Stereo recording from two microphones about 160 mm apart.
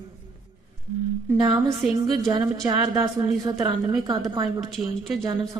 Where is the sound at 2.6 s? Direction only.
25° right (ahead or behind).